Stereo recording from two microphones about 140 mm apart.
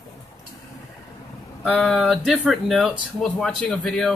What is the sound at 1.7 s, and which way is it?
Speech, centre (ahead or behind).